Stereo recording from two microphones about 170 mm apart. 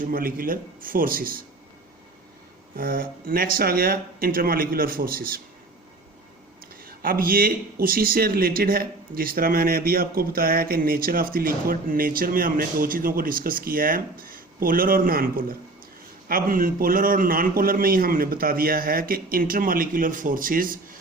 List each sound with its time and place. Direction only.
0.0 s speech: 55° right (ahead or behind)
2.7 s speech: 60° right (ahead or behind)
6.8 s speech: 55° right (ahead or behind)